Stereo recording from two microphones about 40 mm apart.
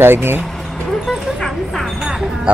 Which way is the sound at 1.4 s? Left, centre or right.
Centre.